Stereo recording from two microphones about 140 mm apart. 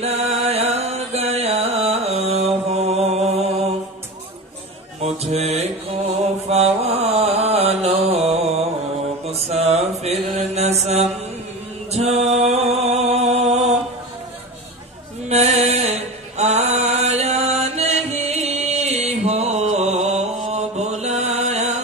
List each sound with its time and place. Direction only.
0.0 s music: 45° right (ahead or behind)
5.2 s music: 50° right (ahead or behind)
6.5 s mantra: 50° right (ahead or behind)
11.9 s music: 50° right (ahead or behind)
15.2 s mantra: 50° right (ahead or behind)